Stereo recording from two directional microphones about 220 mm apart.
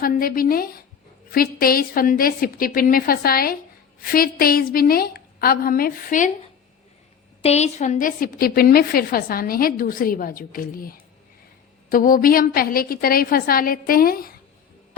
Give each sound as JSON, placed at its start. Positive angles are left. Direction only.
{"t": 0.0, "sound": "a woman's voice", "side_deg": 40}
{"t": 7.4, "sound": "a woman's voice", "side_deg": 30}